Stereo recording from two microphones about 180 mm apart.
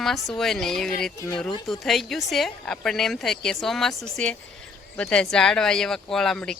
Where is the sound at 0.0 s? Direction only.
Centre (ahead or behind).